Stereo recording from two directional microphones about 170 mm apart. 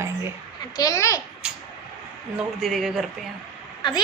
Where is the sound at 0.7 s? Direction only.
20° left (ahead or behind).